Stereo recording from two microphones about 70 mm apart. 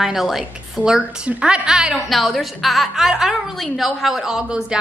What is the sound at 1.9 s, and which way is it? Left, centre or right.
A woman's voice, centre.